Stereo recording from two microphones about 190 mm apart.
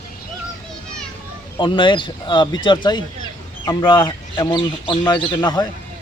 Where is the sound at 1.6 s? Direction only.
25° left (ahead or behind).